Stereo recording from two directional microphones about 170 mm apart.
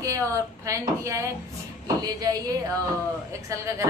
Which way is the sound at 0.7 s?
20° right (ahead or behind).